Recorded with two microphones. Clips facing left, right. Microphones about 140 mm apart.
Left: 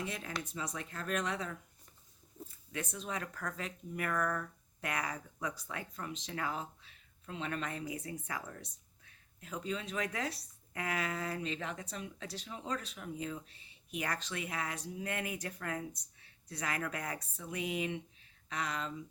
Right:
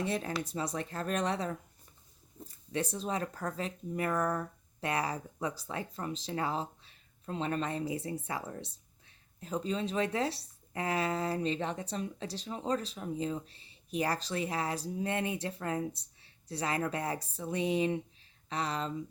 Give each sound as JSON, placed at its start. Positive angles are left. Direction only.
{"t": 0.0, "sound": "speech", "side_deg": -35}
{"t": 2.7, "sound": "speech", "side_deg": -35}